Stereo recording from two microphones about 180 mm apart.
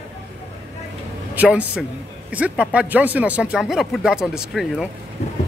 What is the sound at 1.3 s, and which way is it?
Speech, 10° right (ahead or behind).